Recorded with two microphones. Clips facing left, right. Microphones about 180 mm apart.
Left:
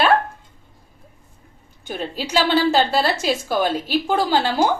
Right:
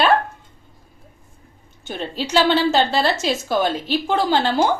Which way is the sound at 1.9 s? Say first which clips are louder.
Right 1 dB; 10° left (ahead or behind).